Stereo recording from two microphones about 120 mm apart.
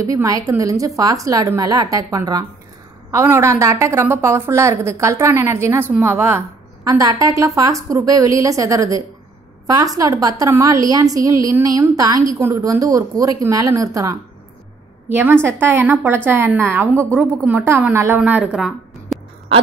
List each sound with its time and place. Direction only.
0.0 s a woman's voice: 30° right (ahead or behind); by 19.1 s 5° right (ahead or behind)